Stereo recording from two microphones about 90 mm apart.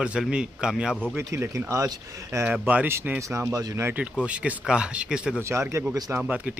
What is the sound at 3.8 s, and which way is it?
A man's voice, 20° right (ahead or behind).